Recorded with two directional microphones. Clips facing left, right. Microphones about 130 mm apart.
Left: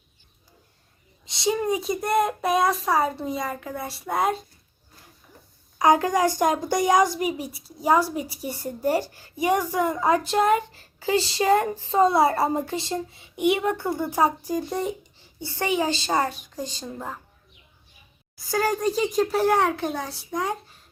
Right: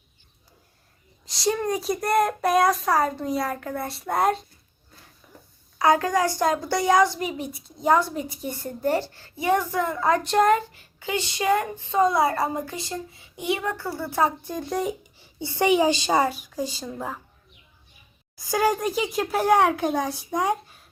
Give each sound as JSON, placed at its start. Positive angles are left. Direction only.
{"t": 1.2, "sound": "speech", "side_deg": 0}
{"t": 5.8, "sound": "a woman's voice", "side_deg": 15}
{"t": 10.7, "sound": "child singing", "side_deg": 35}
{"t": 15.2, "sound": "a child's voice", "side_deg": -15}
{"t": 18.3, "sound": "a child's voice", "side_deg": -15}